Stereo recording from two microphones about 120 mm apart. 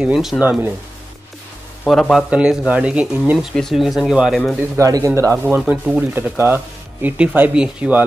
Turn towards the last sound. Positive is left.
turn(degrees=-10)  # may be behind; listen again after turning